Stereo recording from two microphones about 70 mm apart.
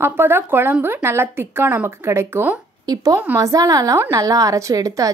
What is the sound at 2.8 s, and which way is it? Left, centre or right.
A woman's voice, right.